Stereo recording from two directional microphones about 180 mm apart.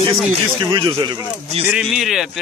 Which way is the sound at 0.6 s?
25° right (ahead or behind).